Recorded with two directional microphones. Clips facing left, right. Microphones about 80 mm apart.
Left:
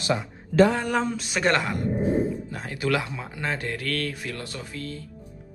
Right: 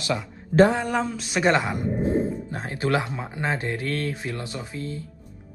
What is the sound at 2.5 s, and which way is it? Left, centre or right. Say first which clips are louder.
Speech: right 2 dB; right.